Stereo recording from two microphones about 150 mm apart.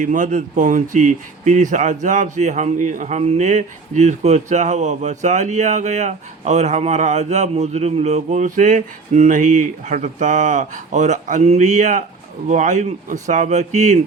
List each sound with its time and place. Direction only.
0.0 s speech: 60° right (ahead or behind)